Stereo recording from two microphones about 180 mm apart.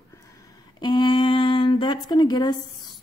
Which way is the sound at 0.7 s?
25° left (ahead or behind).